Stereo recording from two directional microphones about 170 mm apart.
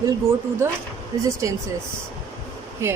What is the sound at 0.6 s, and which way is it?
Speech, 15° right (ahead or behind).